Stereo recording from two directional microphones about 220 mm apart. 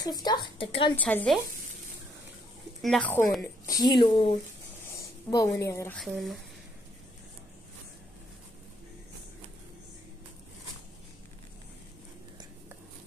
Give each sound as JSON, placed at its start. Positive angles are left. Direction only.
{"t": 0.0, "sound": "a woman's voice", "side_deg": 20}
{"t": 0.9, "sound": "a woman's voice", "side_deg": 5}
{"t": 2.8, "sound": "a woman's voice", "side_deg": 5}
{"t": 3.8, "sound": "a woman's voice", "side_deg": 20}
{"t": 5.9, "sound": "a woman's voice", "side_deg": 0}